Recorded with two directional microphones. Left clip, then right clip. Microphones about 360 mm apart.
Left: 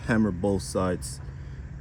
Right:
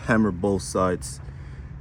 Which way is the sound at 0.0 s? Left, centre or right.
Centre.